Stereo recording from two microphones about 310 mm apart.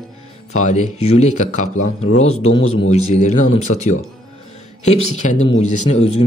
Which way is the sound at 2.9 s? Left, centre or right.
Left.